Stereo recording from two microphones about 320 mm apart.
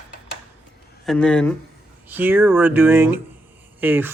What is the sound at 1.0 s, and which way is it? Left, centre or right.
Speech, centre.